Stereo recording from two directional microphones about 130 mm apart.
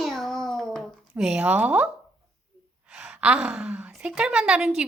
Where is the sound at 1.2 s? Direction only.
5° right (ahead or behind).